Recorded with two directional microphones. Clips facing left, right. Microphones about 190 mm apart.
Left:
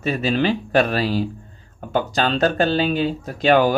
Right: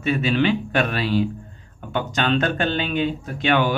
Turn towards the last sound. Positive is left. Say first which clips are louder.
# left 4 dB
turn(degrees=40)  # may be behind; listen again after turning